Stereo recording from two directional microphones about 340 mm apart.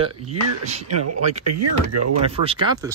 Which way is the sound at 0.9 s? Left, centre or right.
Right.